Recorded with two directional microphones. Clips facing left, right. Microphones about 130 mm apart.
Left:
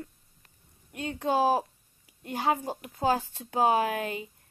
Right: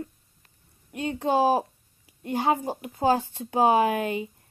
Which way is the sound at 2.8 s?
10° right (ahead or behind).